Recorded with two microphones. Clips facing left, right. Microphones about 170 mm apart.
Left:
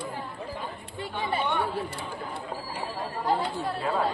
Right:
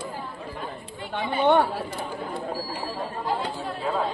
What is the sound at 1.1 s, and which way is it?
Speech, 65° right (ahead or behind).